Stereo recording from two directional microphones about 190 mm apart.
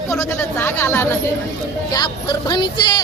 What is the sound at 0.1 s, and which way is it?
Speech, 15° left (ahead or behind).